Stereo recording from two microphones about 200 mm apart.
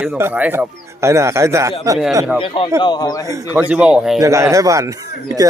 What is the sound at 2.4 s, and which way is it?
Speech, 25° left (ahead or behind).